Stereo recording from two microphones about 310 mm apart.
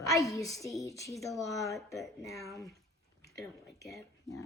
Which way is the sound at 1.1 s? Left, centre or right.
Centre.